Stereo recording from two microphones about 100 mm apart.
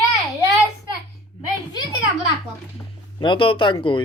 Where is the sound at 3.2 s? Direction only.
55° left (ahead or behind).